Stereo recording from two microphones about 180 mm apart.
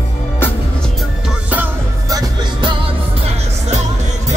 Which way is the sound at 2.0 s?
20° right (ahead or behind).